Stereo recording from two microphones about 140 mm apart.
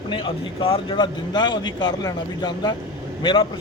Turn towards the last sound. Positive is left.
turn(degrees=35)  # may be behind; listen again after turning